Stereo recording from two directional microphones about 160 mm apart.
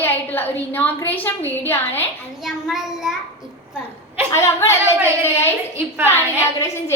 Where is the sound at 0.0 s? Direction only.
10° left (ahead or behind).